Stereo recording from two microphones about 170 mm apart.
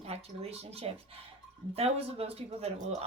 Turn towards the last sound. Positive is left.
turn(degrees=-40)  # may be behind; listen again after turning